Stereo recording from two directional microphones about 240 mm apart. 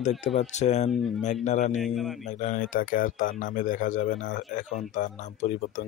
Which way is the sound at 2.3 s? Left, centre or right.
Left.